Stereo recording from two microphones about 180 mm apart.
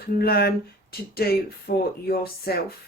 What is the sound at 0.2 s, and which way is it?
Speech, 60° left (ahead or behind).